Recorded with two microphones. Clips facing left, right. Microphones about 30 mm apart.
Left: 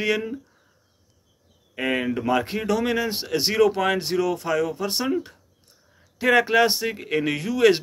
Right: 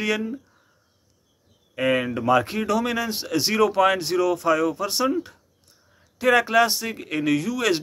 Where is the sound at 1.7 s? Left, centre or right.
Centre.